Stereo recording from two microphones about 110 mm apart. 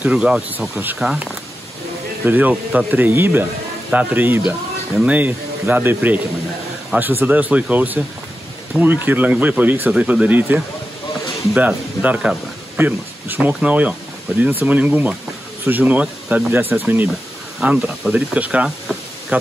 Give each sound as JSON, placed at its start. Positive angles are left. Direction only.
{"t": 0.0, "sound": "speech", "side_deg": -5}
{"t": 0.9, "sound": "speech", "side_deg": -5}
{"t": 2.2, "sound": "speech", "side_deg": -15}
{"t": 17.6, "sound": "speech", "side_deg": -5}